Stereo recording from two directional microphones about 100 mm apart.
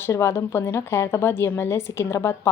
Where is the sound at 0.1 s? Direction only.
25° left (ahead or behind).